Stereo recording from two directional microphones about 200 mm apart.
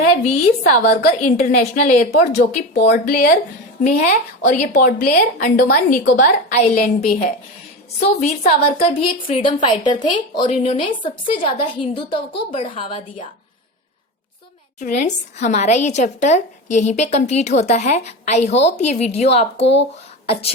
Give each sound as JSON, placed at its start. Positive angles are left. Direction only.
{"t": 0.1, "sound": "a woman's voice", "side_deg": 35}
{"t": 0.8, "sound": "a woman's voice", "side_deg": 55}
{"t": 1.2, "sound": "a woman's voice", "side_deg": 35}
{"t": 2.8, "sound": "speech", "side_deg": 55}
{"t": 3.8, "sound": "a woman's voice", "side_deg": 40}
{"t": 14.8, "sound": "a woman's voice", "side_deg": 40}
{"t": 19.6, "sound": "speech", "side_deg": 60}
{"t": 20.2, "sound": "speech", "side_deg": 30}